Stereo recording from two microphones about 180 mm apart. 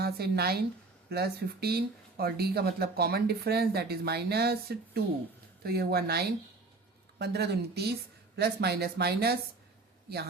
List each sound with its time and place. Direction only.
0.0 s a woman's voice: 60° right (ahead or behind)